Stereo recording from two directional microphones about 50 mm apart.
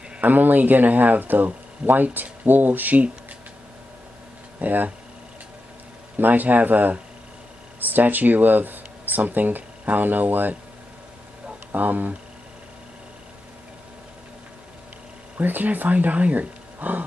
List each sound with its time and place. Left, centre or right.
0.2 s speech: right
4.6 s speech: right
6.1 s speech: right
11.7 s speech: right
15.3 s speech: right